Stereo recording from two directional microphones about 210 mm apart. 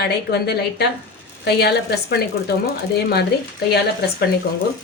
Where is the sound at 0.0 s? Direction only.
50° left (ahead or behind).